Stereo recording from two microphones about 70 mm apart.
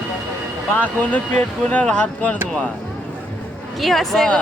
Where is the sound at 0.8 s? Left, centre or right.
Left.